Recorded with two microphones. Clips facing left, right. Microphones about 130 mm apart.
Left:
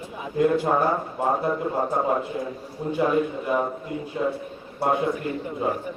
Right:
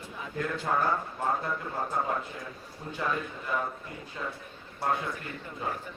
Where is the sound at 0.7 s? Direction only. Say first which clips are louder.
Left 6 dB; 35° left (ahead or behind).